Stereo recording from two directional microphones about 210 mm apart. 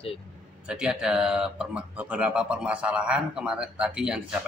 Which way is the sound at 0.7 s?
5° right (ahead or behind).